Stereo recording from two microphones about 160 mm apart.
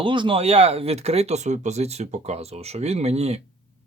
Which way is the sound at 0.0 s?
30° right (ahead or behind).